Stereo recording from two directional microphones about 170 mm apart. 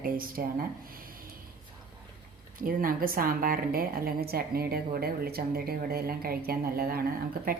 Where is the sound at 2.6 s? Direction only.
55° right (ahead or behind).